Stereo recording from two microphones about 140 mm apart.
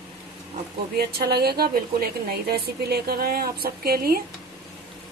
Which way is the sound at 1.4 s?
90° right.